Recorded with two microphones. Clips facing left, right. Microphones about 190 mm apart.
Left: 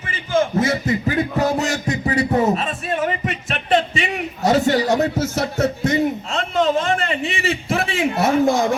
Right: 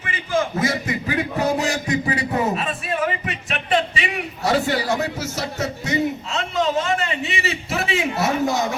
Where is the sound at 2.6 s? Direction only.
45° left (ahead or behind).